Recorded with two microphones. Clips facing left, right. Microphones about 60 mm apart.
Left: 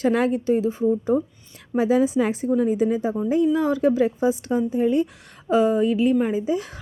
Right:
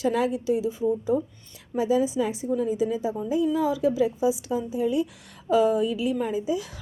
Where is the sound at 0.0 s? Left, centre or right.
Left.